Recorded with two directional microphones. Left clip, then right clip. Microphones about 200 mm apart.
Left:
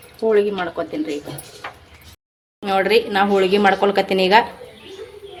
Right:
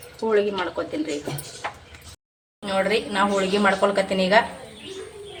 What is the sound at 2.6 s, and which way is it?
A woman's voice, 45° left (ahead or behind).